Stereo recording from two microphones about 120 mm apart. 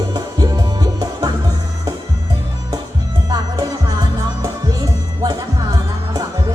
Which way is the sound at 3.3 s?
35° right (ahead or behind).